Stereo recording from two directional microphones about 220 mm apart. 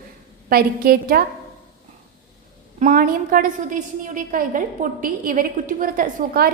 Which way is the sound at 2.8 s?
40° right (ahead or behind).